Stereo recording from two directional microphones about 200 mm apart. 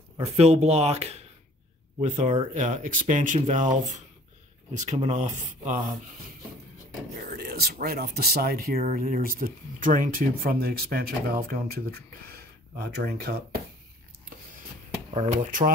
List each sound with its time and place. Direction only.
0.2 s speech: 30° right (ahead or behind)
7.2 s speech: 50° right (ahead or behind)
15.1 s speech: 35° right (ahead or behind)